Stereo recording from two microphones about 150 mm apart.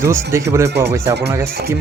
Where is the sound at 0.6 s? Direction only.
90° right.